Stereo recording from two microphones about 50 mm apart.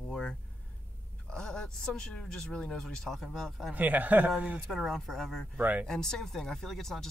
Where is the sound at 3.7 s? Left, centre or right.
Right.